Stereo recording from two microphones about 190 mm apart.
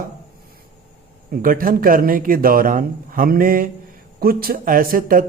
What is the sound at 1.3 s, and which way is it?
Speech, 45° right (ahead or behind).